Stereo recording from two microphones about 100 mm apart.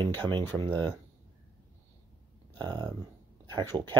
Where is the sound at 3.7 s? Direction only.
10° right (ahead or behind).